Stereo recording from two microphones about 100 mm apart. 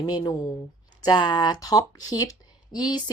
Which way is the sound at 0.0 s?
45° left (ahead or behind).